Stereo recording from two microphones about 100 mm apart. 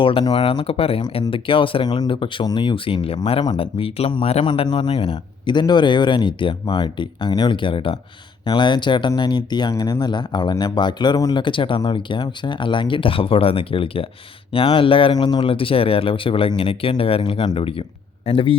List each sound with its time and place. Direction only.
0.0 s speech: 60° left (ahead or behind); by 4.4 s 75° left (ahead or behind)
4.4 s a man's voice: 55° left (ahead or behind)
15.1 s speech: 50° left (ahead or behind)